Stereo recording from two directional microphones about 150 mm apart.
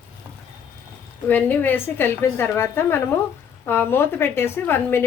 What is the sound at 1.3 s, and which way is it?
A woman's voice, 10° left (ahead or behind).